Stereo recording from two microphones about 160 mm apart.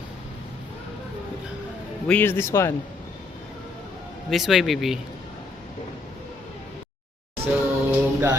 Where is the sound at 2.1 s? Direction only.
10° left (ahead or behind).